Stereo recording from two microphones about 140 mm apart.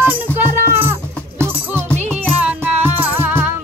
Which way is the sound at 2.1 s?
10° right (ahead or behind).